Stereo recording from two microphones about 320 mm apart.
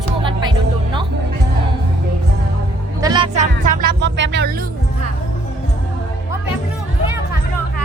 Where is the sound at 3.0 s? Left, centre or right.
Centre; by 4.5 s right.